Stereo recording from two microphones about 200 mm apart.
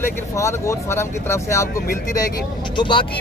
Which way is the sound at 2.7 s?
25° left (ahead or behind).